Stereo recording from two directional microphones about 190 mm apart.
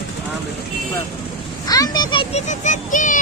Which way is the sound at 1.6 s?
20° left (ahead or behind).